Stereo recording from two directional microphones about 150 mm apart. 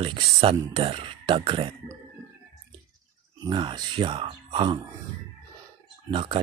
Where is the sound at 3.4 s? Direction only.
30° right (ahead or behind).